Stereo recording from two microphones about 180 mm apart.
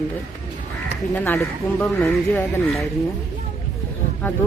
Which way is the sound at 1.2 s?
10° left (ahead or behind).